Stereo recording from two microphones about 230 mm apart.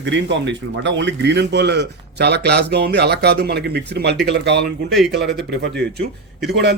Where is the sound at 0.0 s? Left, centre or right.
Right.